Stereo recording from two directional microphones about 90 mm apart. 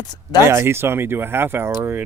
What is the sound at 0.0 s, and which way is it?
Speech, 50° left (ahead or behind).